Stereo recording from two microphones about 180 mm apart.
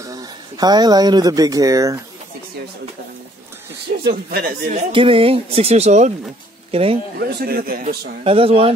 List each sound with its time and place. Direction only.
0.0 s speech: 20° right (ahead or behind)
3.8 s a man's voice: 60° right (ahead or behind)
4.6 s speech: 30° right (ahead or behind)
7.2 s a man's voice: 60° right (ahead or behind)
8.2 s speech: 30° right (ahead or behind)